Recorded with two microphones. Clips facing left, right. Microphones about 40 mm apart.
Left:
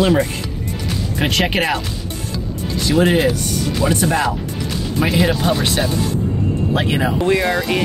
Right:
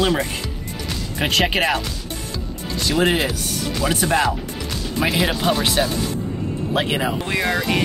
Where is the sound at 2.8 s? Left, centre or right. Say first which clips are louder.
Left 4 dB; centre.